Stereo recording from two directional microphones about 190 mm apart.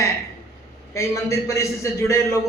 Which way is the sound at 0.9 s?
15° left (ahead or behind).